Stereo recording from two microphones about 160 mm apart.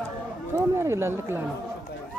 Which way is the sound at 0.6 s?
15° right (ahead or behind).